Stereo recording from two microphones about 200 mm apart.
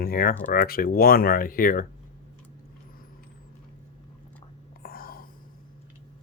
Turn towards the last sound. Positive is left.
turn(degrees=45)  # may be behind; listen again after turning